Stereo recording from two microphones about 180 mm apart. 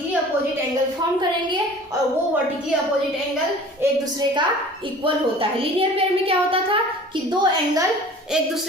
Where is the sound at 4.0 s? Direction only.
25° right (ahead or behind).